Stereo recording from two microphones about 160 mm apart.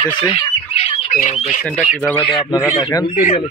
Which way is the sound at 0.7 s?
40° left (ahead or behind).